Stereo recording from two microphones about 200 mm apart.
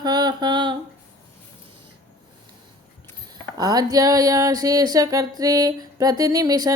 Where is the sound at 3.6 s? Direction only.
20° right (ahead or behind).